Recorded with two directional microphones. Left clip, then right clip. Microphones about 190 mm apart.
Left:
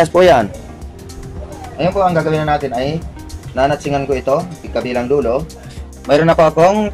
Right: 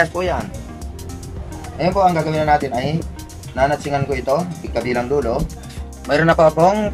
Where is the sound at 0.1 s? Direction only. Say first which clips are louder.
Left 12 dB; 50° left (ahead or behind).